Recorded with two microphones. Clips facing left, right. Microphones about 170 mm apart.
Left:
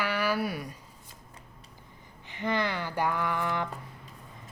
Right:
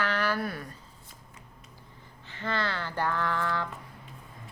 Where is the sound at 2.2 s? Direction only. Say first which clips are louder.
Left 2 dB; 15° left (ahead or behind).